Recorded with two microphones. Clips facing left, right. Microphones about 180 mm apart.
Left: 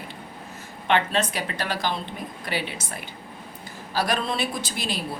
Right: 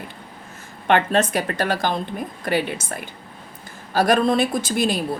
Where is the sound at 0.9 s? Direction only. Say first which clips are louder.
Right 5 dB; 50° right (ahead or behind).